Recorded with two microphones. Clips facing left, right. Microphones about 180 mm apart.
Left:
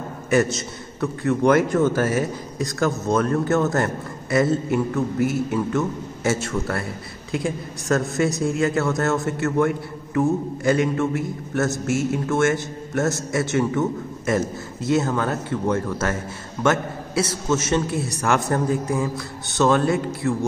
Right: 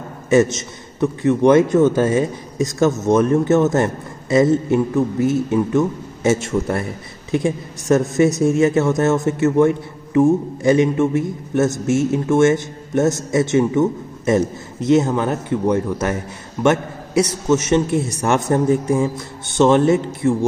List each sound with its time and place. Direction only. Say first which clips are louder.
0.3 s a man's voice: right 5 dB; 20° right (ahead or behind)